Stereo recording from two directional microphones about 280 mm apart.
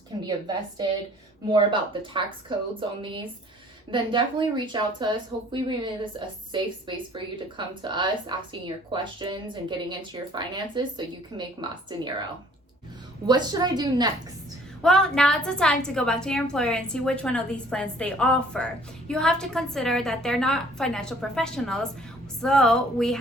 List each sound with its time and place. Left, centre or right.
0.3 s a woman's voice: centre
3.9 s a woman's voice: centre
13.2 s a woman's voice: centre
14.8 s a woman's voice: centre